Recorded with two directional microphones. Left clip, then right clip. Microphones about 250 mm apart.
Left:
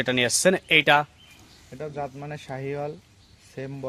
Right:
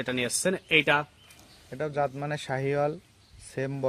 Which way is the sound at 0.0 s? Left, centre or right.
Left.